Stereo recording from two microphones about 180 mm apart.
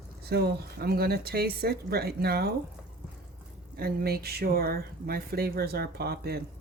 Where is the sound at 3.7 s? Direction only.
60° right (ahead or behind).